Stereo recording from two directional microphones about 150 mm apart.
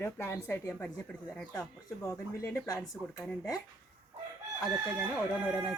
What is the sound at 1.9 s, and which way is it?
Speech, 20° left (ahead or behind).